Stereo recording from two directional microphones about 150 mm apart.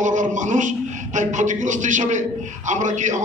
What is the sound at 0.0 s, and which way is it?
A man's voice, 55° right (ahead or behind).